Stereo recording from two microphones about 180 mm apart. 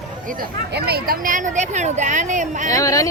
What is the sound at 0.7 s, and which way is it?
Speech, 60° right (ahead or behind).